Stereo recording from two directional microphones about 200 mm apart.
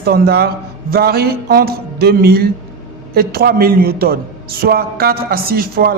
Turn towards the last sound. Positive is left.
turn(degrees=-50)  # may be behind; listen again after turning